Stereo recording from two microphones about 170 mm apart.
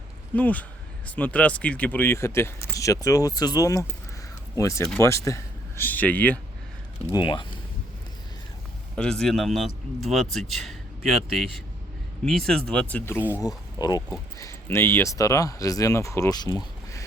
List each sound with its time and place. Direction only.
0.3 s speech: 10° left (ahead or behind)
7.1 s speech: 25° left (ahead or behind)
9.0 s a man's voice: 5° left (ahead or behind)
13.7 s speech: 25° left (ahead or behind)